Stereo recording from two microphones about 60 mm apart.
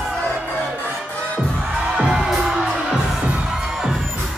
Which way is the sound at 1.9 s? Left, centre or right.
Centre.